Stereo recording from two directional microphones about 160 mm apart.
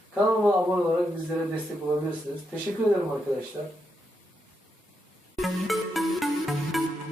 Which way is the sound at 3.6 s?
35° right (ahead or behind).